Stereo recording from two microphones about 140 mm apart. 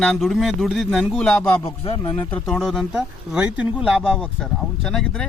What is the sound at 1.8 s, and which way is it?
Speech, 45° left (ahead or behind).